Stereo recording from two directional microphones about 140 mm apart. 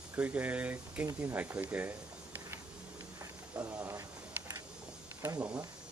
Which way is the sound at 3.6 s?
15° right (ahead or behind).